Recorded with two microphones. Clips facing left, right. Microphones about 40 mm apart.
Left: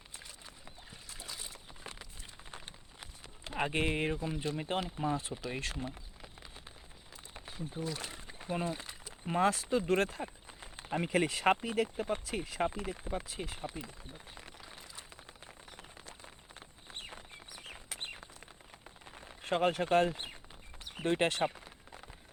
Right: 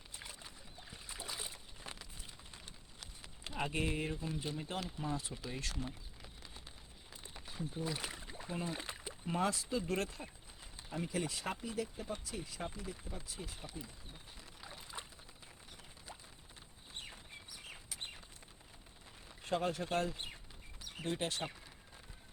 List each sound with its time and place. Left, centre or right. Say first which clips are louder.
0.2 s rowboat: right 1 dB; centre
1.0 s boat: right 1 dB; centre
3.5 s speech: left 5 dB; left
7.8 s speech: left 2 dB; centre
8.1 s rowboat: even; left
8.4 s speech: left 5 dB; left
16.9 s bird: left 3 dB; left
19.4 s speech: left 6 dB; left